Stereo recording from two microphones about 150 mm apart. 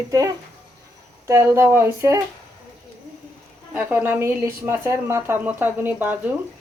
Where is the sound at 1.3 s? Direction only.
15° right (ahead or behind).